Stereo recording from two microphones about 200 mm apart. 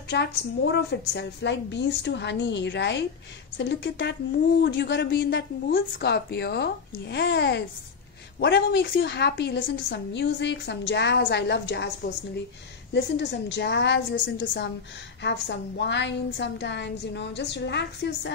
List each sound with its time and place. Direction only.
0.1 s a woman's voice: 60° left (ahead or behind)
5.7 s a woman's voice: 50° left (ahead or behind)
12.9 s a woman's voice: 60° left (ahead or behind)